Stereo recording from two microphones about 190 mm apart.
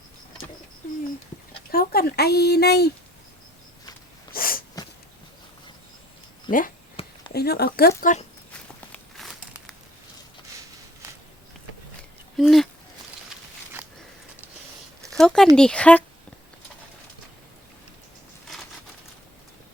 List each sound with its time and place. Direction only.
1.7 s speech: 55° left (ahead or behind)
4.3 s sneeze: 50° left (ahead or behind)
6.5 s speech: 25° left (ahead or behind)
7.0 s a sound: 30° left (ahead or behind)
7.3 s speech: 60° left (ahead or behind)
8.5 s walk: 5° left (ahead or behind)
12.4 s speech: centre (ahead or behind)
13.8 s a sound: 10° right (ahead or behind)
15.1 s speech: 5° left (ahead or behind)